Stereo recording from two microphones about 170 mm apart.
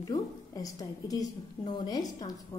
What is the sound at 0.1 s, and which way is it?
A woman's voice, 20° left (ahead or behind).